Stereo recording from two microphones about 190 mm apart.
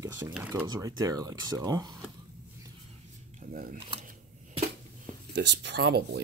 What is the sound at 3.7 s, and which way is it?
Speech, 30° right (ahead or behind).